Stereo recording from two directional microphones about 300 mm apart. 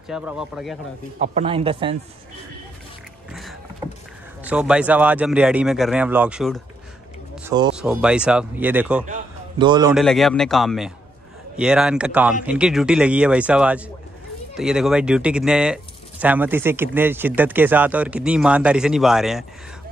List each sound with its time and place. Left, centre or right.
0.1 s speech: centre
1.2 s speech: centre
4.5 s speech: centre
7.4 s speech: centre
7.7 s speech: centre
9.0 s a sound: centre
9.9 s speech: centre